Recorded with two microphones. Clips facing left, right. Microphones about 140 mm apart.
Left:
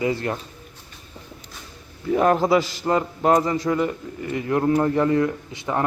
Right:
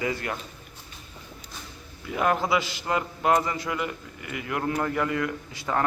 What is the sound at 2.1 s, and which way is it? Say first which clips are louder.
A man's voice: left 7 dB; 35° left (ahead or behind).